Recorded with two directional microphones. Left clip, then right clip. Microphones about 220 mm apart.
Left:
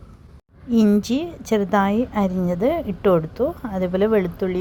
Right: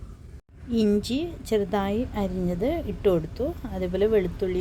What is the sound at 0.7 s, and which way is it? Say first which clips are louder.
A woman's voice: left 5 dB; 15° left (ahead or behind).